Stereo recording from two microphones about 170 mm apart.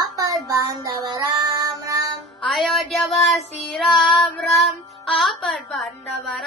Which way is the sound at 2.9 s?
Centre (ahead or behind).